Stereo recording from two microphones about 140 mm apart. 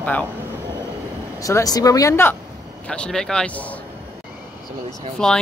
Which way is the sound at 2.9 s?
5° left (ahead or behind).